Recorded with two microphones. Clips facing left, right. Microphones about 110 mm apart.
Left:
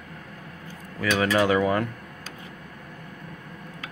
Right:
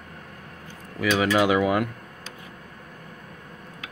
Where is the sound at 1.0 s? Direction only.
10° right (ahead or behind).